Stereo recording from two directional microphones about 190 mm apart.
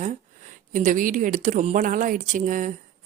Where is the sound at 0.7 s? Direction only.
40° right (ahead or behind).